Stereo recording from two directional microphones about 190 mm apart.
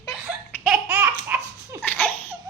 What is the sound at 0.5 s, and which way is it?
Laughter, centre (ahead or behind).